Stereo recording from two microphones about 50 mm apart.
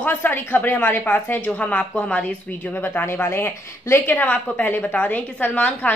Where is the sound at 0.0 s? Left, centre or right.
Left.